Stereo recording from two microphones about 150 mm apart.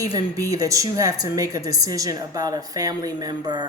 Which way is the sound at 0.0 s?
25° right (ahead or behind).